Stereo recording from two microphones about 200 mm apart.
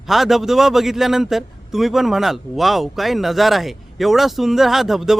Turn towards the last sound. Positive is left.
turn(degrees=0)  # may be behind; listen again after turning